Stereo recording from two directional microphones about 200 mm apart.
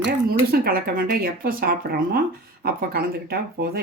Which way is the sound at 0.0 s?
50° right (ahead or behind).